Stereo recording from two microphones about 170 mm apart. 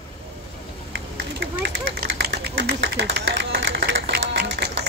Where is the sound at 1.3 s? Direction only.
70° right (ahead or behind).